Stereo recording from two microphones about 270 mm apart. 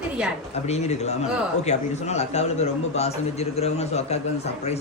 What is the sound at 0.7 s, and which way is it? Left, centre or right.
A man's voice, left.